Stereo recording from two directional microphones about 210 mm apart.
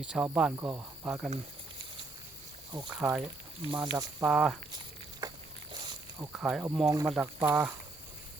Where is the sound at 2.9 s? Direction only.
10° right (ahead or behind).